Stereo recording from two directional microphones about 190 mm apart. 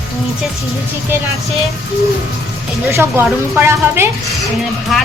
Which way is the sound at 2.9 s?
15° right (ahead or behind).